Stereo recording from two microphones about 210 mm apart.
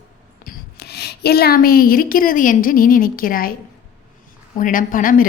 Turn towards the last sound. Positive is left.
turn(degrees=40)  # may be behind; listen again after turning